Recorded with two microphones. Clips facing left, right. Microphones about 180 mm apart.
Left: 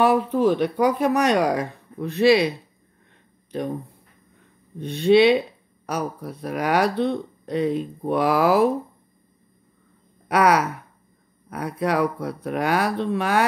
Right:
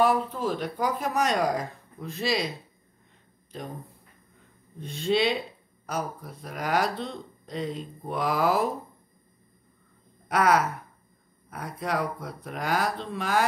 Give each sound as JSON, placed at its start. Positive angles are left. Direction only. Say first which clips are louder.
{"t": 0.0, "sound": "speech", "louder": "left 6 dB", "side_deg": 65}
{"t": 3.5, "sound": "speech", "louder": "left 11 dB", "side_deg": 70}
{"t": 4.7, "sound": "speech", "louder": "left 9 dB", "side_deg": 65}
{"t": 10.2, "sound": "speech", "louder": "left 4 dB", "side_deg": 70}